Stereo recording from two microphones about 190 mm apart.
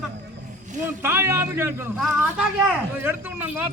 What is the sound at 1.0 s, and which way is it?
A man's voice, 15° right (ahead or behind).